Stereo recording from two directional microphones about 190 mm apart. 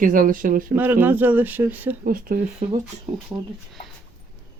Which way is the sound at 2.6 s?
30° right (ahead or behind).